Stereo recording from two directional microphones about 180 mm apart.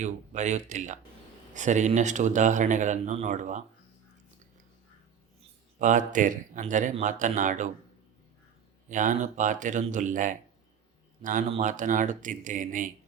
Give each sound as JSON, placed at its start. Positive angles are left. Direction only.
{"t": 0.0, "sound": "speech", "side_deg": -40}
{"t": 5.8, "sound": "speech", "side_deg": -45}
{"t": 8.9, "sound": "speech", "side_deg": -45}